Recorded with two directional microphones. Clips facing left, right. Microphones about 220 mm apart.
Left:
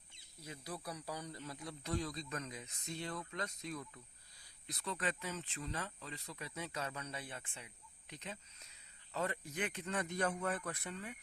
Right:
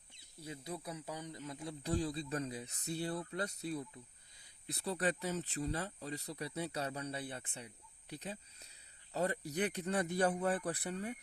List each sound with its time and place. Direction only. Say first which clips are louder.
0.3 s speech: right 3 dB; 25° right (ahead or behind)